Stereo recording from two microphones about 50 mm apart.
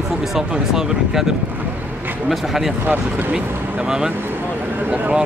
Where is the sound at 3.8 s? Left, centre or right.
Centre.